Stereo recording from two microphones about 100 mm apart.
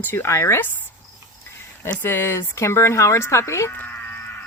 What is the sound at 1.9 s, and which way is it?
Speech, 20° left (ahead or behind).